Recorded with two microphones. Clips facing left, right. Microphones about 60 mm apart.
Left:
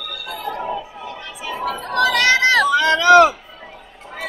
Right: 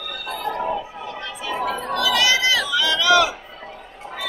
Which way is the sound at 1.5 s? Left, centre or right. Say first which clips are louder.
Even; right.